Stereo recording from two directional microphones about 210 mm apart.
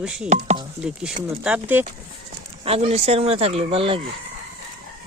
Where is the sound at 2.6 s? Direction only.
30° right (ahead or behind).